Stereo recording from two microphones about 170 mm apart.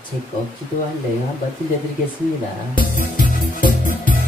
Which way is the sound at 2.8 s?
55° left (ahead or behind).